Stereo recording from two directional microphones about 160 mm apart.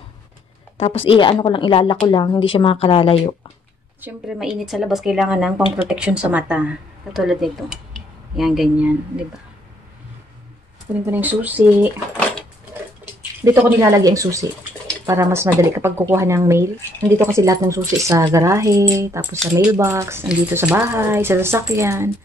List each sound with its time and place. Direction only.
0.7 s a woman's voice: 35° left (ahead or behind)
4.0 s a woman's voice: 5° right (ahead or behind)
11.1 s speech: 10° right (ahead or behind)
13.4 s speech: 15° right (ahead or behind)